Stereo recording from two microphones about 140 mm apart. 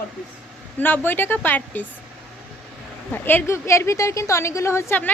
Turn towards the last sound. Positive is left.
turn(degrees=15)  # may be behind; listen again after turning